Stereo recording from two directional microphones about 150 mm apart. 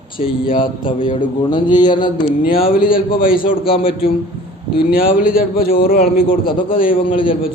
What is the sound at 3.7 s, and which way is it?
Speech, 35° left (ahead or behind).